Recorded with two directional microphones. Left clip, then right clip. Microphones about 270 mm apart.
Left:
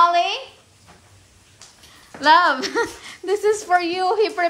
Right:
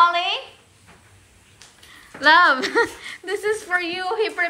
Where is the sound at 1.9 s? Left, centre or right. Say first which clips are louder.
Left 1 dB; centre.